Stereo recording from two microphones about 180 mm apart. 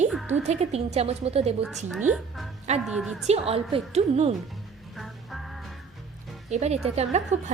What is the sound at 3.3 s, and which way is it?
A woman's voice, 35° right (ahead or behind).